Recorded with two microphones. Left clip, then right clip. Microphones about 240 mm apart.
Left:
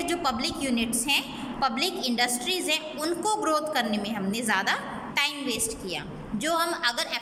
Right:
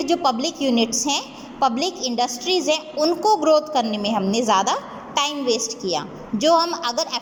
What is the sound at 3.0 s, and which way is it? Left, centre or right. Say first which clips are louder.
Speech: right 10 dB; centre.